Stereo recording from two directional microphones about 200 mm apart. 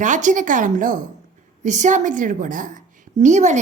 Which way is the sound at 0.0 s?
40° right (ahead or behind).